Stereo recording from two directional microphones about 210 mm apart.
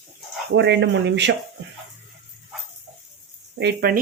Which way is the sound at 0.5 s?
55° right (ahead or behind).